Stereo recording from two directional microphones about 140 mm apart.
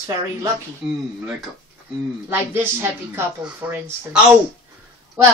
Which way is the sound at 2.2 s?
15° right (ahead or behind).